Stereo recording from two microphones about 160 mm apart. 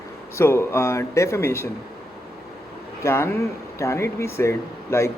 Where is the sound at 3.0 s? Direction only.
15° left (ahead or behind).